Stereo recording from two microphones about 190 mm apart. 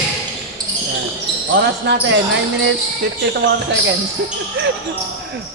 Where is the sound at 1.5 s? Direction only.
65° right (ahead or behind).